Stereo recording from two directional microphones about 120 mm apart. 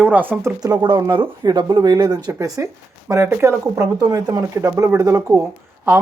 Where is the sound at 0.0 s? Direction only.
15° right (ahead or behind).